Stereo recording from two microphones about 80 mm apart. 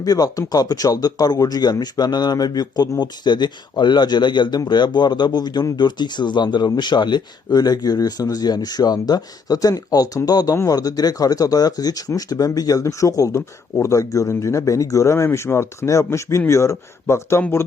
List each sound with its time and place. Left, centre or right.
0.0 s speech: left